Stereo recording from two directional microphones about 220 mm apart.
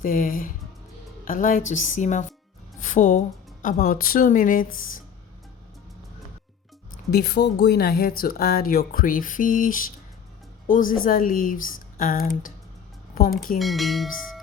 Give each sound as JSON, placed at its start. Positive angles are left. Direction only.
{"t": 0.0, "sound": "speech", "side_deg": 40}
{"t": 7.1, "sound": "speech", "side_deg": 45}
{"t": 13.6, "sound": "speech", "side_deg": 0}